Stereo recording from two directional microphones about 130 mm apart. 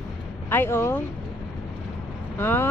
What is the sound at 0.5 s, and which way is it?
Speech, 20° left (ahead or behind).